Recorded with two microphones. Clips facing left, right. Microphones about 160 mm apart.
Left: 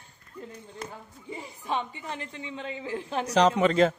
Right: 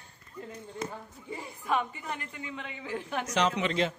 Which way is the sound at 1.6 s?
25° left (ahead or behind).